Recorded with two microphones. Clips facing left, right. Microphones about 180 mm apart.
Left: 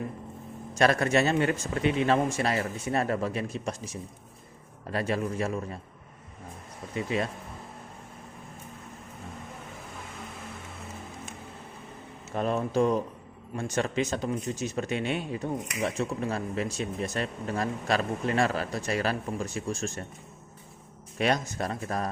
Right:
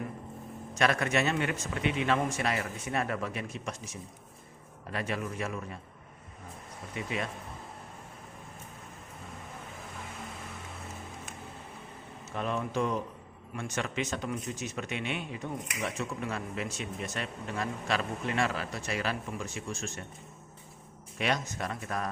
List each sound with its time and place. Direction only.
0.8 s speech: 35° left (ahead or behind)
4.9 s speech: 35° left (ahead or behind)
6.9 s speech: 35° left (ahead or behind)
12.3 s speech: 40° left (ahead or behind)
21.2 s speech: 40° left (ahead or behind)